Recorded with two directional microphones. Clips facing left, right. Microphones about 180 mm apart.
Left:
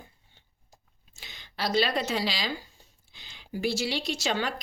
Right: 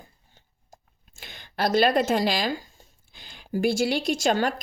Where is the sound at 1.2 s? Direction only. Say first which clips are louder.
Right 6 dB; 50° right (ahead or behind).